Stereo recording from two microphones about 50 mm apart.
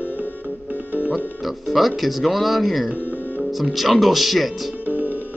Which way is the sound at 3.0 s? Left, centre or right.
Left.